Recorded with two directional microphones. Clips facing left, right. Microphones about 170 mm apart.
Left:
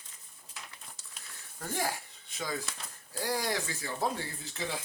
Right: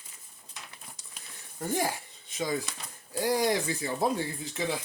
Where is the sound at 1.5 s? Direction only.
15° right (ahead or behind).